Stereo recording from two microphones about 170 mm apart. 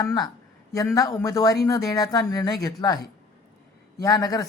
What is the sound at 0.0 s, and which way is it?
Speech, 20° left (ahead or behind).